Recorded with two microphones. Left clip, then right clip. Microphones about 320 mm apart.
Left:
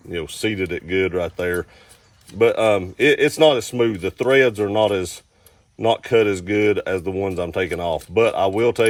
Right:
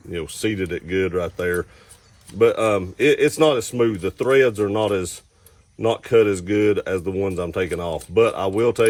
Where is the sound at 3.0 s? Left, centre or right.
Left.